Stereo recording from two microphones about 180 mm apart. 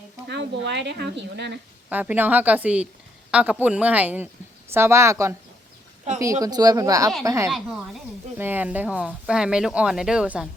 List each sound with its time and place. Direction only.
0.3 s speech: 70° right (ahead or behind)
1.9 s speech: 10° right (ahead or behind)
6.1 s speech: 40° right (ahead or behind)
6.4 s speech: 20° right (ahead or behind)
7.5 s speech: 5° right (ahead or behind)